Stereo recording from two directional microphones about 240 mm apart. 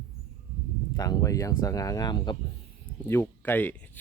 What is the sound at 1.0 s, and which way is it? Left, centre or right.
Speech, centre.